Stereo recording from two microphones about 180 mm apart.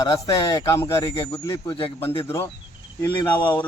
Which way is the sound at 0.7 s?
15° left (ahead or behind).